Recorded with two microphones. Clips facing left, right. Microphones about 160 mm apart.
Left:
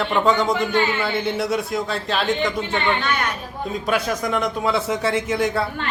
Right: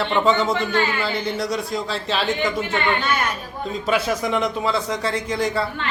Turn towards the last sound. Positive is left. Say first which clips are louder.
# left 1 dB
turn(degrees=0)  # may be behind; listen again after turning